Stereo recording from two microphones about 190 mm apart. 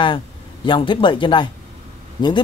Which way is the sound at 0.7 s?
25° left (ahead or behind).